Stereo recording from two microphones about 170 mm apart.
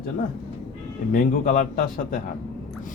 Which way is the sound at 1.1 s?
55° left (ahead or behind).